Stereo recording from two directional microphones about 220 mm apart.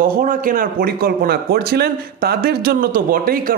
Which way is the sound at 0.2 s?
40° right (ahead or behind).